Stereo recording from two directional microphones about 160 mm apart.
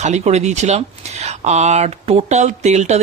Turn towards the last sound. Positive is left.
turn(degrees=-45)  # may be behind; listen again after turning